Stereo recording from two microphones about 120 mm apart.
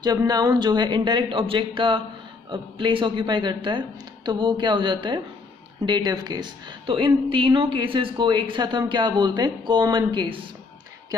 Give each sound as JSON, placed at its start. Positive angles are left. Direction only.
{"t": 0.0, "sound": "a man's voice", "side_deg": -35}
{"t": 7.2, "sound": "speech", "side_deg": -45}